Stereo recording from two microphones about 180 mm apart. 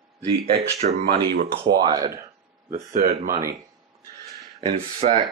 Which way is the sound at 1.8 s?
20° right (ahead or behind).